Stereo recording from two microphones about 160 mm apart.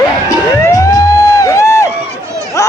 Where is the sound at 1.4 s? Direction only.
20° left (ahead or behind).